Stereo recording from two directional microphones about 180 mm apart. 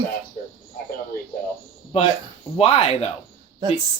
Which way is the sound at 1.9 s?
35° left (ahead or behind).